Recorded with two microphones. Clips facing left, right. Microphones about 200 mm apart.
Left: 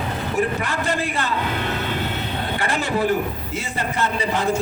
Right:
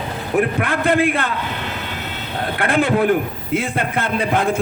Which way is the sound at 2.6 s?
55° right (ahead or behind).